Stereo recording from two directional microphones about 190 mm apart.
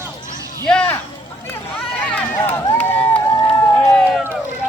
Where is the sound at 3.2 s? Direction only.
15° left (ahead or behind).